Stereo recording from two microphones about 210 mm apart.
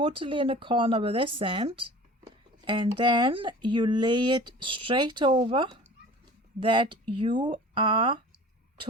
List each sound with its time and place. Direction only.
0.0 s speech: 25° right (ahead or behind)